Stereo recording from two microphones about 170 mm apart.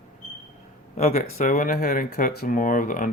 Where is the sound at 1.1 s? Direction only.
55° left (ahead or behind).